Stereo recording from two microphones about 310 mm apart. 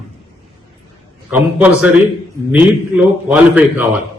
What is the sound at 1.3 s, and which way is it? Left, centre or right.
Speech, centre.